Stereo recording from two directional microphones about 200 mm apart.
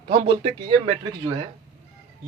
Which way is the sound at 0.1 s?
30° right (ahead or behind).